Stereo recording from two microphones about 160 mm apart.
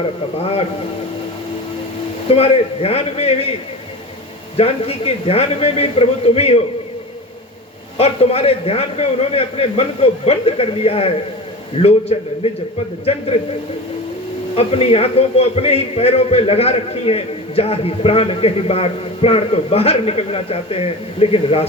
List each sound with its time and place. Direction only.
2.3 s a man's voice: 40° left (ahead or behind)
4.5 s a man's voice: 35° left (ahead or behind)
7.9 s a man's voice: 40° left (ahead or behind)
14.5 s a man's voice: 35° left (ahead or behind)